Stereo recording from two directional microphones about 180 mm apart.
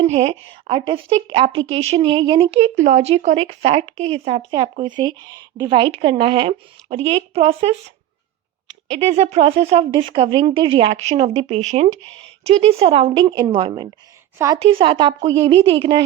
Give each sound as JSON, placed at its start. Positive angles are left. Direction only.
{"t": 0.0, "sound": "speech", "side_deg": -35}
{"t": 9.0, "sound": "a woman's voice", "side_deg": -35}
{"t": 14.6, "sound": "speech", "side_deg": -30}